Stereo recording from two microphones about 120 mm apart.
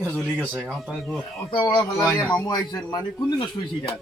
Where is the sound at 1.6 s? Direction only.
40° left (ahead or behind).